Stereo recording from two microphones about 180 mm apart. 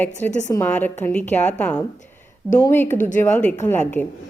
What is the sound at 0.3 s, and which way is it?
Speech, 40° left (ahead or behind).